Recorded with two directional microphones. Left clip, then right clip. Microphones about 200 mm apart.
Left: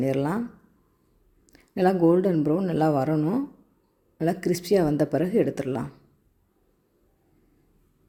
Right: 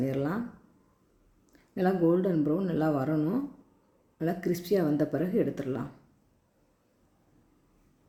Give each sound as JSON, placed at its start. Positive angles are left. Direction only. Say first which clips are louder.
{"t": 0.0, "sound": "speech", "louder": "left 6 dB", "side_deg": 40}
{"t": 1.5, "sound": "speech", "louder": "left 6 dB", "side_deg": 40}